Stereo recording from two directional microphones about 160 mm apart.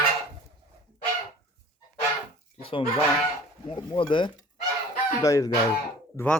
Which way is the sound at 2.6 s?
35° left (ahead or behind).